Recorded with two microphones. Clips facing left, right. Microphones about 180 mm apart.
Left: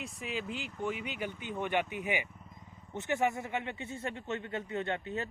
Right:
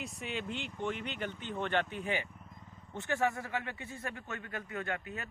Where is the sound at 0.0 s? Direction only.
Centre (ahead or behind).